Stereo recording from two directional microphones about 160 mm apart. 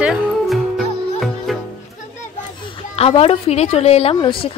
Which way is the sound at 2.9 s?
40° left (ahead or behind).